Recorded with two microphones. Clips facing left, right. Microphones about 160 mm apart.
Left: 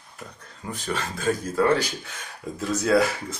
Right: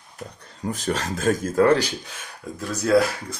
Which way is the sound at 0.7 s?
40° right (ahead or behind).